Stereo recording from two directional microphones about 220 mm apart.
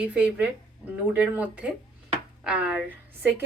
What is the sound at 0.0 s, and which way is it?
Speech, 5° right (ahead or behind).